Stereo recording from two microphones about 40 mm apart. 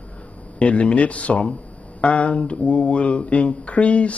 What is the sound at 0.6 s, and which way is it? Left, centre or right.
Speech, left.